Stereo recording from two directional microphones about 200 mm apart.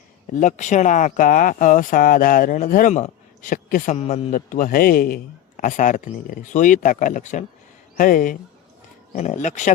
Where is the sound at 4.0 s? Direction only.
35° left (ahead or behind).